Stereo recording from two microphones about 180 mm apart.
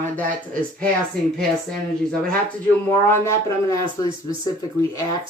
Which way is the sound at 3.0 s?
15° left (ahead or behind).